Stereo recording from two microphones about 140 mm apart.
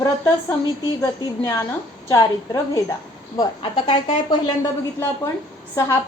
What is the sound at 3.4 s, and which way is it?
A woman's voice, 35° left (ahead or behind).